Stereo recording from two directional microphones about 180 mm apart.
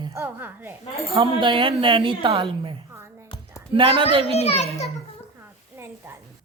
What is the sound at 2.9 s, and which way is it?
Music, 15° right (ahead or behind).